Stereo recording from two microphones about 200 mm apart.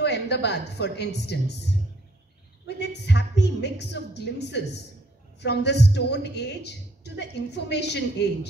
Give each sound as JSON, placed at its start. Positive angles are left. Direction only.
{"t": 0.0, "sound": "a woman's voice", "side_deg": 55}